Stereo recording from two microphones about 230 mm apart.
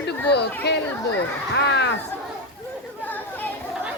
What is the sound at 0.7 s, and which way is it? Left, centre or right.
Speech, left.